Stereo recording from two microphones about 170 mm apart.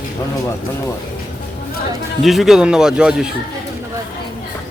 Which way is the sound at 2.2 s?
Centre (ahead or behind).